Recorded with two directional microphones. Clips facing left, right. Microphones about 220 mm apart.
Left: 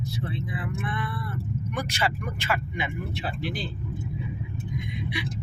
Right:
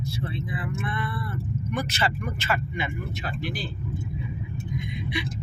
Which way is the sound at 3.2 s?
30° left (ahead or behind).